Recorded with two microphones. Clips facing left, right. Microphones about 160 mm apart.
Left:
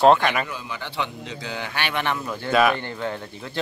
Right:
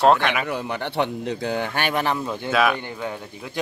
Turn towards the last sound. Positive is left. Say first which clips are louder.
# left 1 dB
turn(degrees=-10)  # may be behind; listen again after turning